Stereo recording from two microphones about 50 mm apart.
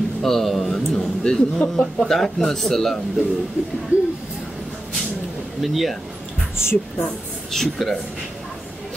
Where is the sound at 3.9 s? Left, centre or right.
Right.